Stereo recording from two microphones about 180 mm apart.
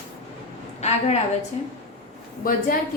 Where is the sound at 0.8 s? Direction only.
35° left (ahead or behind).